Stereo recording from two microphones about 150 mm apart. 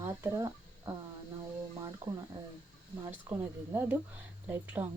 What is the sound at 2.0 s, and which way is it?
Speech, 15° right (ahead or behind).